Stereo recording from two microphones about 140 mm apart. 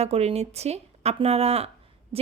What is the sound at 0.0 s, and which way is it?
A woman's voice, 45° right (ahead or behind).